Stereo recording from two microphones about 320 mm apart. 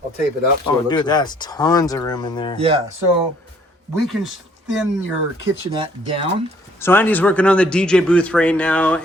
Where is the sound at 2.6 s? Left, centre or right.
Centre.